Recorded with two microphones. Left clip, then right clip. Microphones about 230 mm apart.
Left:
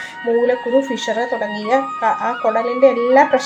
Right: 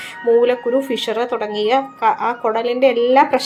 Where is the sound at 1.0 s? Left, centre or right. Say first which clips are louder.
Even; right.